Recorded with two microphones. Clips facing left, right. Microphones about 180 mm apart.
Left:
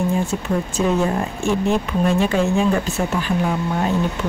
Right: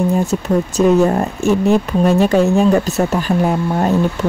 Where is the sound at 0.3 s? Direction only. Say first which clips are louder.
Right 6 dB; 40° right (ahead or behind).